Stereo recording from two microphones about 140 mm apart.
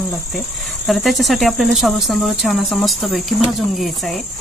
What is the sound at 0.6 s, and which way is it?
Speech, centre (ahead or behind).